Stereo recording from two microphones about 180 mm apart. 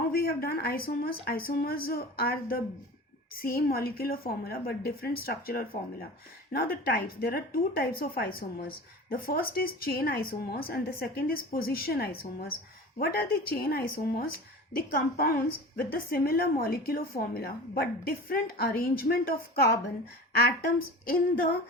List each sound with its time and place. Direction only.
0.1 s speech: 55° left (ahead or behind)